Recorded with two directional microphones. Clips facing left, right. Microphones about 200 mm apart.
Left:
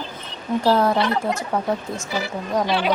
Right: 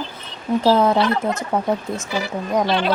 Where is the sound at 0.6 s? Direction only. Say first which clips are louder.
Right 2 dB; 20° right (ahead or behind).